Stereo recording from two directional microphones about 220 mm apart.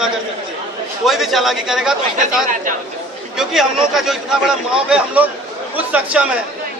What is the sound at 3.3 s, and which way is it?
A man's voice, centre (ahead or behind).